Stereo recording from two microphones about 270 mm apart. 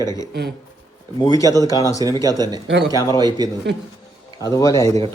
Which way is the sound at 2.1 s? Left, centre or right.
Centre.